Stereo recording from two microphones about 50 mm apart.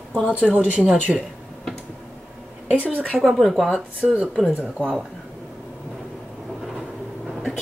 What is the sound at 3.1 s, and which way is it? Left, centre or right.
Speech, centre.